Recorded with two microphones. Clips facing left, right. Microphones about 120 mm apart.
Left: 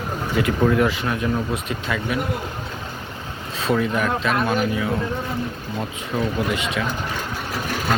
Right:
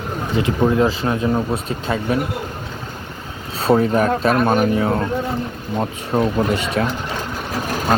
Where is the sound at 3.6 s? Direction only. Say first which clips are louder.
Right 6 dB; 35° right (ahead or behind).